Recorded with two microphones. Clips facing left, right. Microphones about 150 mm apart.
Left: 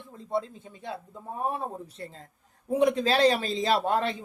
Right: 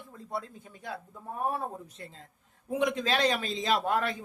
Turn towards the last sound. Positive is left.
turn(degrees=25)  # may be behind; listen again after turning